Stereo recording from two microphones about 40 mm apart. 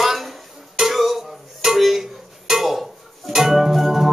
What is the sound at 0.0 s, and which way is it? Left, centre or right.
Music, centre.